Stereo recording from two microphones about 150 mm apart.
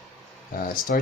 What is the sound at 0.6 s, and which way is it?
Speech, 65° left (ahead or behind).